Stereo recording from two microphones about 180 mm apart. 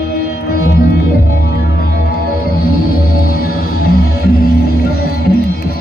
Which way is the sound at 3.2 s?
55° left (ahead or behind).